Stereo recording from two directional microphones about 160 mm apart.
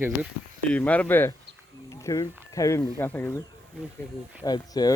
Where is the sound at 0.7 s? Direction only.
10° left (ahead or behind).